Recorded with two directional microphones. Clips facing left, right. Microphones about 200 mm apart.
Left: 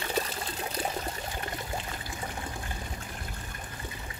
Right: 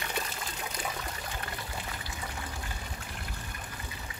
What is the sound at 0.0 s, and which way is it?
Water, 35° left (ahead or behind).